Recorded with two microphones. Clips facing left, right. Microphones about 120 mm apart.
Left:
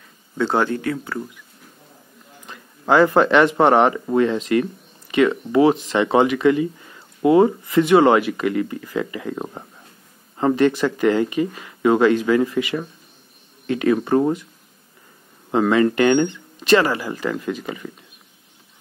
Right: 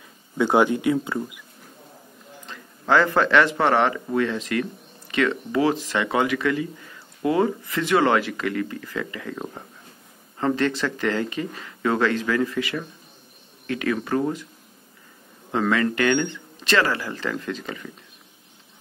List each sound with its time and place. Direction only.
0.4 s speech: 15° right (ahead or behind)
2.4 s speech: 15° left (ahead or behind)
15.5 s speech: 20° left (ahead or behind)